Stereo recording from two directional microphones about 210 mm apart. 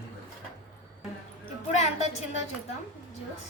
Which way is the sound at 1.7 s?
30° left (ahead or behind).